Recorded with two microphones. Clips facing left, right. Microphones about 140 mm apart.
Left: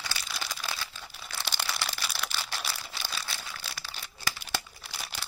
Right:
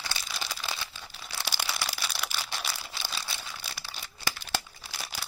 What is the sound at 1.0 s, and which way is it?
Crumpling, centre (ahead or behind).